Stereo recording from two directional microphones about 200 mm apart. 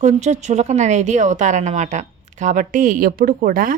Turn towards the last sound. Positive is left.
turn(degrees=-45)  # may be behind; listen again after turning